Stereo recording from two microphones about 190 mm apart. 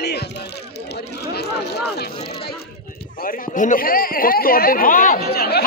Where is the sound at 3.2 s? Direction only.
50° left (ahead or behind).